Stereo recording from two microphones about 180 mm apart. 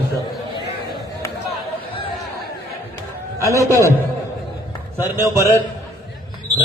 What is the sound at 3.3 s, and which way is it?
Speech, 15° right (ahead or behind).